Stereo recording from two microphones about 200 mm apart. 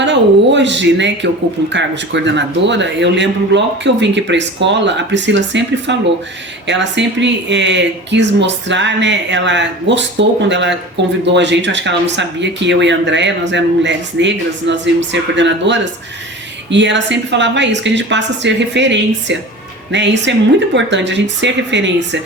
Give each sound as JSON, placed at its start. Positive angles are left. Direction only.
{"t": 0.0, "sound": "speech", "side_deg": -65}